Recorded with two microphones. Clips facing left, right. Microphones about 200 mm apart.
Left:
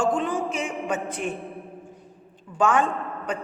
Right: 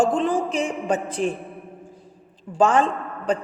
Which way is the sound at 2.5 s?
35° right (ahead or behind).